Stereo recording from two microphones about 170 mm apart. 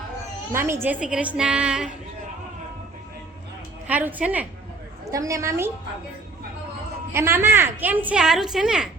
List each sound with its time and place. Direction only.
0.5 s a woman's voice: 15° right (ahead or behind)
3.8 s a woman's voice: 10° right (ahead or behind)
7.1 s a woman's voice: 15° right (ahead or behind)